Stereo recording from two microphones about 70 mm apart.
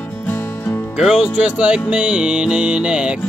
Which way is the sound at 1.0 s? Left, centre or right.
Centre.